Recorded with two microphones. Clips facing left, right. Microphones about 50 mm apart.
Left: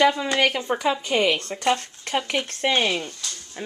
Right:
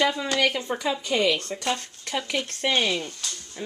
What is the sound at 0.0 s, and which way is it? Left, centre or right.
Speech, centre.